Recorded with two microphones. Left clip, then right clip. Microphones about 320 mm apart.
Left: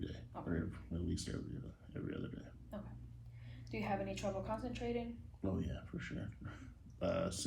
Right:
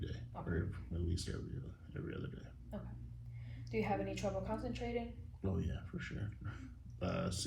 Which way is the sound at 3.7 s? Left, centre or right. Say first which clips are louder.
Right 2 dB; centre.